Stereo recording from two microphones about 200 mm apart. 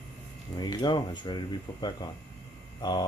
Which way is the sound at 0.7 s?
20° left (ahead or behind).